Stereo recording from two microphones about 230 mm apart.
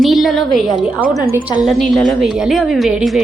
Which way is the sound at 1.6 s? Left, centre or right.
Centre.